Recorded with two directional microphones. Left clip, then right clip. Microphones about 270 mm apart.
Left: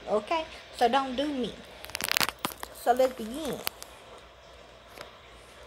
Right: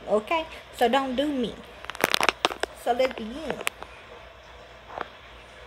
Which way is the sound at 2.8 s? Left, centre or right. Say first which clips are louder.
Even; centre.